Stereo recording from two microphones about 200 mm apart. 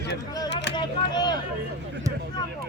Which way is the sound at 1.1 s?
20° left (ahead or behind).